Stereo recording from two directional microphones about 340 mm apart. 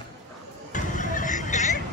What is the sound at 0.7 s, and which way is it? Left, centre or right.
Vehicle, left.